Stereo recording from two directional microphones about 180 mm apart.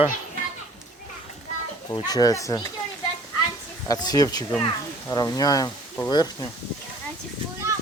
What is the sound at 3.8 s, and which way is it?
Speech, 20° left (ahead or behind).